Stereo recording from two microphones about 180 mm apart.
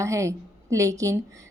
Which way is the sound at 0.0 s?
15° right (ahead or behind).